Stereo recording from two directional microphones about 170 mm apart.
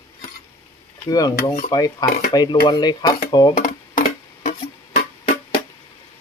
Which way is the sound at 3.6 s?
55° left (ahead or behind).